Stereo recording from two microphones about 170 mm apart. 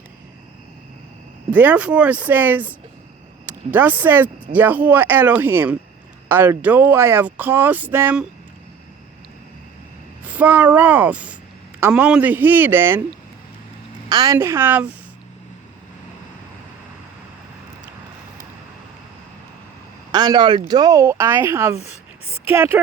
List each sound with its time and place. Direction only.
1.5 s speech: 10° right (ahead or behind)
10.2 s speech: 10° right (ahead or behind)
14.1 s speech: 20° right (ahead or behind)
20.1 s speech: 25° right (ahead or behind)
21.8 s a sound: 40° left (ahead or behind)
22.4 s speech: 15° right (ahead or behind)